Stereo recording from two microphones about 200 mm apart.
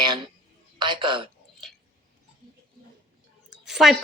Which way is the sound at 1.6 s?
Centre (ahead or behind).